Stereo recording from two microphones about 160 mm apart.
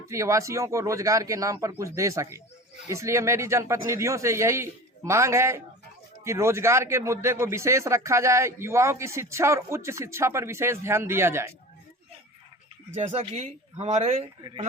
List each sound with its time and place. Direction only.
0.0 s speech: 20° right (ahead or behind)
13.0 s speech: 40° right (ahead or behind)